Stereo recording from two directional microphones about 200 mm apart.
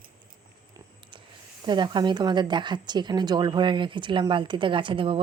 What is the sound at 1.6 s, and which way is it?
A woman's voice, 20° right (ahead or behind).